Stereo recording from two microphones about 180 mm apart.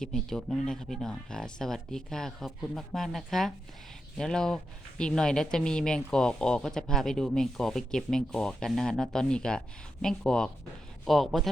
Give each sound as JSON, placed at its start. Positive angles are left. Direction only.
{"t": 0.0, "sound": "speech", "side_deg": 5}